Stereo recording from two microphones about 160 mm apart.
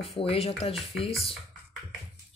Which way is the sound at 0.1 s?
35° left (ahead or behind).